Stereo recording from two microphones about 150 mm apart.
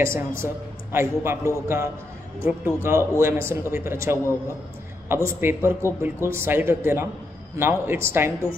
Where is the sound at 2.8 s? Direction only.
15° right (ahead or behind).